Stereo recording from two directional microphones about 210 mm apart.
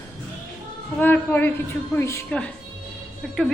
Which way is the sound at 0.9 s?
10° left (ahead or behind).